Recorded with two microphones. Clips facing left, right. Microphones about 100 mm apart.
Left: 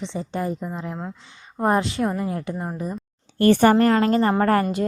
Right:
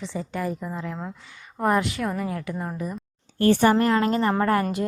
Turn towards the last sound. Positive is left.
turn(degrees=40)  # may be behind; listen again after turning